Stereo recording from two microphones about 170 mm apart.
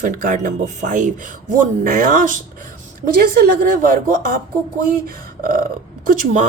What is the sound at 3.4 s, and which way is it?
Speech, 55° right (ahead or behind).